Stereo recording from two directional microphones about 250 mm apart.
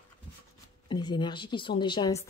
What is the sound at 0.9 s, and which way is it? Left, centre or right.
Speech, centre.